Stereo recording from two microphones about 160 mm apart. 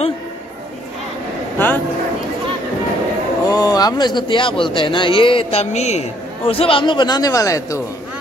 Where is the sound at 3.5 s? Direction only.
25° left (ahead or behind).